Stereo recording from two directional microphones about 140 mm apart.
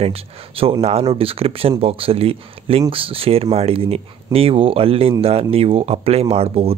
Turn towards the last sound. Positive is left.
turn(degrees=-45)  # may be behind; listen again after turning